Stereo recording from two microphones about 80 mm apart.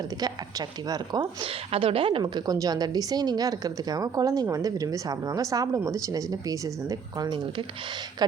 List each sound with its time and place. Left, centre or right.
0.9 s a woman's voice: right
1.4 s a woman's voice: right
2.2 s a woman's voice: right